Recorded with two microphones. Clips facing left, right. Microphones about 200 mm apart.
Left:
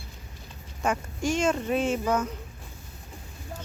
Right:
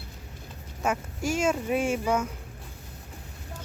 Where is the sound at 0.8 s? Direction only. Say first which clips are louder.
Left 1 dB; 5° right (ahead or behind).